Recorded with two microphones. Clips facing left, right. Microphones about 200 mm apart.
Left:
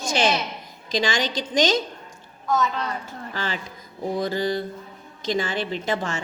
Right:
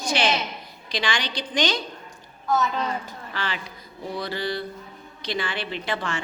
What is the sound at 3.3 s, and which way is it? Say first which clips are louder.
A woman's voice: left 1 dB; 40° left (ahead or behind).